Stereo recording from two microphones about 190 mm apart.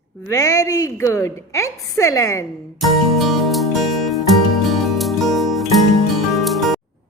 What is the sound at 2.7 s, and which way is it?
Music, centre (ahead or behind).